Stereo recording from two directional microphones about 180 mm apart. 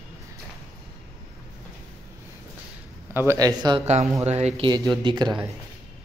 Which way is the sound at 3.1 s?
15° right (ahead or behind).